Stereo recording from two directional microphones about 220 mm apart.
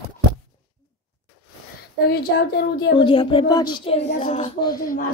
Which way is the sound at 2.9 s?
20° left (ahead or behind).